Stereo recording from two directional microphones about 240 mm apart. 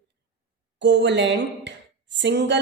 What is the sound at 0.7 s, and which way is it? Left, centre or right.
Speech, right.